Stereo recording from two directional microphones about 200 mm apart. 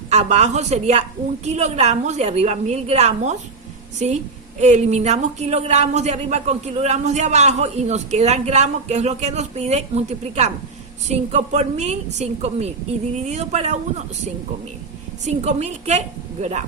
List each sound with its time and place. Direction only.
0.1 s a woman's voice: 35° right (ahead or behind)
15.2 s speech: 35° right (ahead or behind)